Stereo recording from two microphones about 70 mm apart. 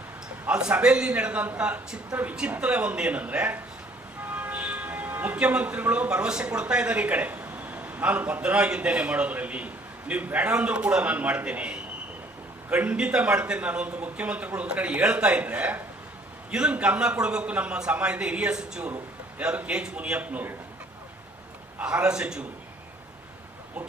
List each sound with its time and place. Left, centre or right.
0.4 s a man's voice: centre
21.8 s a man's voice: centre